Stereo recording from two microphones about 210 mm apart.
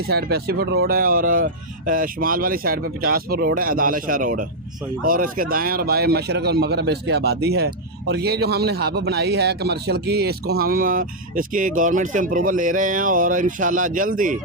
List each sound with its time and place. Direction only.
0.1 s speech: 50° right (ahead or behind)